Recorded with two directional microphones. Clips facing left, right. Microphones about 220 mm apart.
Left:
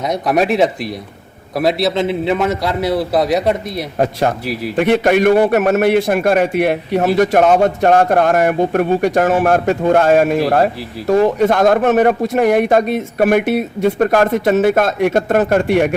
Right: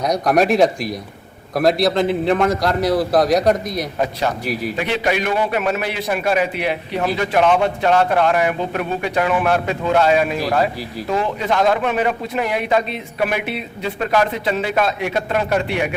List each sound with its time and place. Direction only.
0.0 s a man's voice: centre (ahead or behind)
3.9 s speech: 50° left (ahead or behind)